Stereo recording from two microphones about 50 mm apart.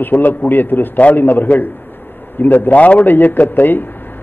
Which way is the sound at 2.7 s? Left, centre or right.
Left.